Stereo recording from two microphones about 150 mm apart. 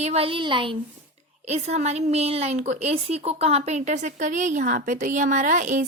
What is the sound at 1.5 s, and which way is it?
A woman's voice, 45° right (ahead or behind).